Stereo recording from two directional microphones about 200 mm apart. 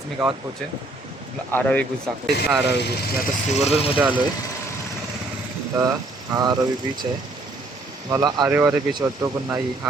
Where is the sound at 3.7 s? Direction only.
30° left (ahead or behind).